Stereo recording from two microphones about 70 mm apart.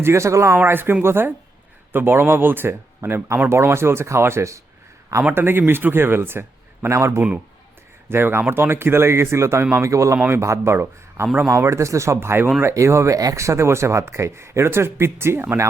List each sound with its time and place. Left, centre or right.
0.0 s speech: right
0.5 s speech: right
3.5 s speech: right
5.3 s speech: right
6.8 s speech: right
8.1 s speech: right